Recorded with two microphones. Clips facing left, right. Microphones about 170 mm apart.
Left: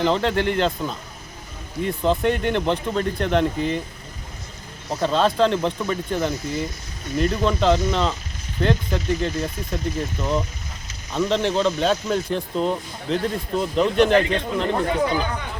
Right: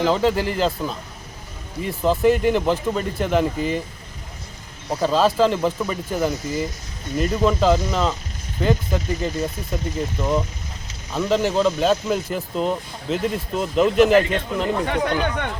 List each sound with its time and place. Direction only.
0.0 s speech: 5° right (ahead or behind)
4.9 s speech: 5° right (ahead or behind)
14.8 s speech: 65° right (ahead or behind)